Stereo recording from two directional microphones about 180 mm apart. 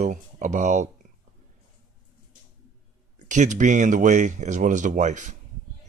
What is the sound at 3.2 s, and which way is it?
Speech, 40° right (ahead or behind).